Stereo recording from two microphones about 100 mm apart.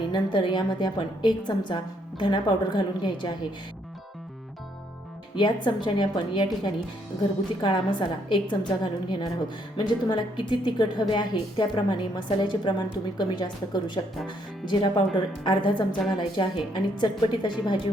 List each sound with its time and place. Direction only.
0.1 s speech: 55° left (ahead or behind)
5.4 s speech: 55° left (ahead or behind)
7.6 s speech: 55° left (ahead or behind)